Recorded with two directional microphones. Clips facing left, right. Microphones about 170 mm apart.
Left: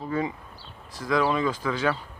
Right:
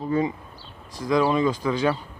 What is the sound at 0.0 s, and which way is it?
Speech, 20° right (ahead or behind).